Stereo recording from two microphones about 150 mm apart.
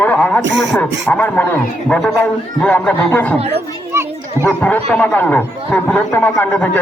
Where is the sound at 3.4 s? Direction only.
40° right (ahead or behind).